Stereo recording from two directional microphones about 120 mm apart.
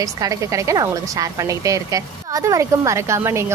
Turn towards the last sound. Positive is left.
turn(degrees=-25)  # may be behind; listen again after turning